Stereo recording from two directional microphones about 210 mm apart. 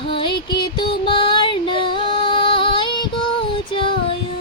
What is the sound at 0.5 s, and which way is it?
Music, 20° left (ahead or behind).